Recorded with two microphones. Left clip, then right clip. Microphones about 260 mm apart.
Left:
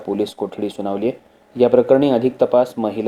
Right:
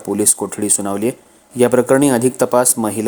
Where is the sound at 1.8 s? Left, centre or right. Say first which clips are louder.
Right 1 dB; right.